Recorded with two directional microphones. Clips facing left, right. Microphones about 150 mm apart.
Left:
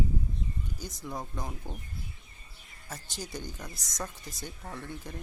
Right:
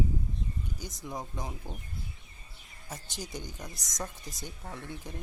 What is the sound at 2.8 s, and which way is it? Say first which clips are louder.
Speech: even; 20° right (ahead or behind).